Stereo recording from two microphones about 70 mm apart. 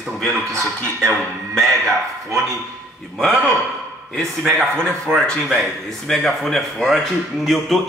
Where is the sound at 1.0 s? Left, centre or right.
Centre.